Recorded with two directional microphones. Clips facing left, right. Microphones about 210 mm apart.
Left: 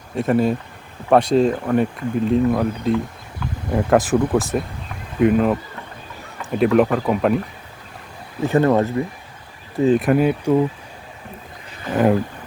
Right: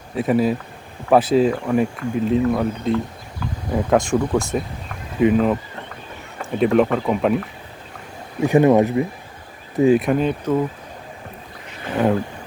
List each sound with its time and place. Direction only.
0.2 s speech: 5° right (ahead or behind)
8.4 s speech: 15° right (ahead or behind)
10.0 s speech: 5° left (ahead or behind)